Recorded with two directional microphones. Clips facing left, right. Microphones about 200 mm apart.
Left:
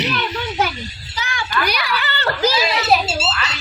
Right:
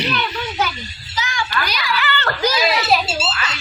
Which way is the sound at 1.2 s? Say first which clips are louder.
Even; 55° left (ahead or behind).